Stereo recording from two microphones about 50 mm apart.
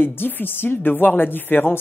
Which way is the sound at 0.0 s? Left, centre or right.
Left.